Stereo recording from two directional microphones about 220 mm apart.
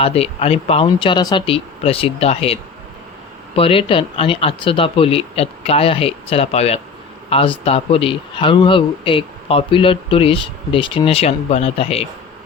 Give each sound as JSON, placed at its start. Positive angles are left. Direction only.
{"t": 0.0, "sound": "speech", "side_deg": 25}